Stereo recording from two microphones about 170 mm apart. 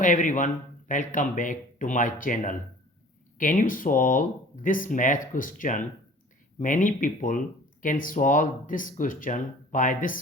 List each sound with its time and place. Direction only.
0.0 s speech: 50° left (ahead or behind)